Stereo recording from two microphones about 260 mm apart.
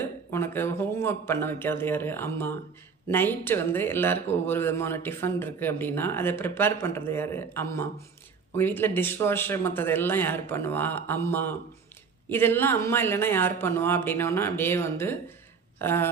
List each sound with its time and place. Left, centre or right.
0.0 s speech: centre